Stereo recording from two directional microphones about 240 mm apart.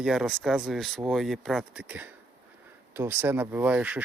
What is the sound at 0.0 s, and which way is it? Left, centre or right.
Speech, centre.